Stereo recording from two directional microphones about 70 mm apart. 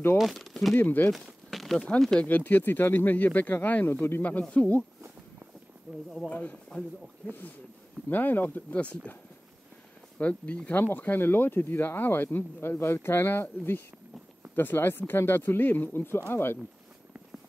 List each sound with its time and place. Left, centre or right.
0.2 s speech: centre
0.7 s speech: left
1.1 s a sound: centre
2.1 s speech: left
5.9 s speech: centre
6.7 s speech: centre
7.2 s speech: left